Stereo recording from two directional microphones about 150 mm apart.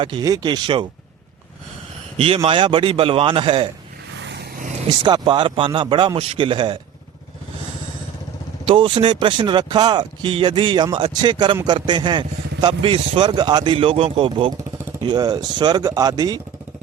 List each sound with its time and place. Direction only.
0.0 s speech: 30° right (ahead or behind)
2.1 s speech: 40° right (ahead or behind)
4.4 s vehicle: 65° right (ahead or behind)
4.7 s vehicle: 45° right (ahead or behind)
5.0 s speech: 30° right (ahead or behind)
8.6 s speech: 35° right (ahead or behind)